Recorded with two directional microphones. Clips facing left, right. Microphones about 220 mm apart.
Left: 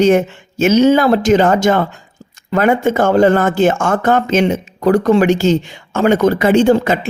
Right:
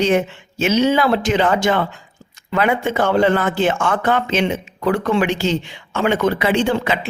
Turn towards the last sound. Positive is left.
turn(degrees=45)  # may be behind; listen again after turning